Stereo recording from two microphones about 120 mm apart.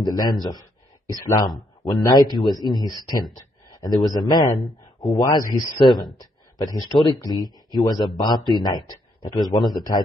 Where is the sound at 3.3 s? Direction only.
30° left (ahead or behind).